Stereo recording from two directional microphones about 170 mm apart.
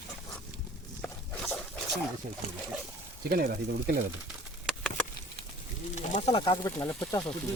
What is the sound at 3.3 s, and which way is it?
Speech, 60° right (ahead or behind).